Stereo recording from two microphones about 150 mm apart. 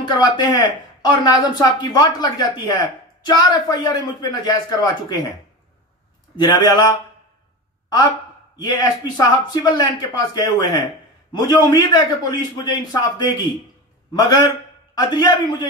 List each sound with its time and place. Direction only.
0.2 s speech: 30° left (ahead or behind)
6.4 s speech: 25° left (ahead or behind)
8.7 s speech: 25° left (ahead or behind)